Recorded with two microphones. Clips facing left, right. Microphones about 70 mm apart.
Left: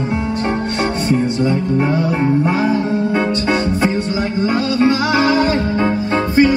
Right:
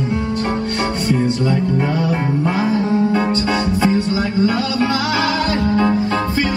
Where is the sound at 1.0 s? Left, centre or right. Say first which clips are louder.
Left 1 dB; left.